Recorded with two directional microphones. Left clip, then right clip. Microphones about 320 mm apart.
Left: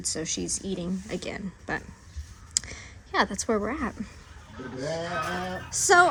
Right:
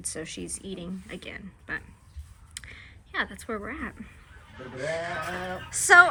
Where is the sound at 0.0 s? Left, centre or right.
Centre.